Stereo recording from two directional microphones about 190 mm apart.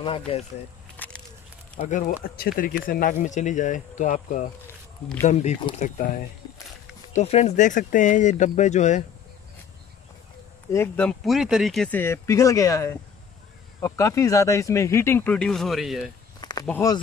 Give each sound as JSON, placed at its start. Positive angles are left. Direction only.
{"t": 0.0, "sound": "speech", "side_deg": 30}
{"t": 0.9, "sound": "a sound", "side_deg": 10}
{"t": 1.8, "sound": "speech", "side_deg": 40}
{"t": 7.2, "sound": "speech", "side_deg": 35}
{"t": 10.7, "sound": "speech", "side_deg": 10}
{"t": 16.3, "sound": "a sound", "side_deg": 20}